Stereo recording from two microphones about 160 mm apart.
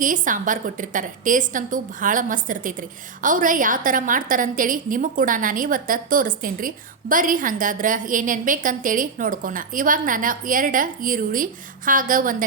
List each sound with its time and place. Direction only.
0.0 s a woman's voice: 55° right (ahead or behind)